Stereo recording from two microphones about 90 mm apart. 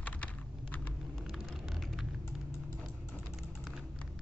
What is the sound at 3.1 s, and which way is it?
Typing, 5° right (ahead or behind).